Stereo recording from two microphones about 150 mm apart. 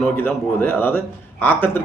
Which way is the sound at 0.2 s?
15° left (ahead or behind).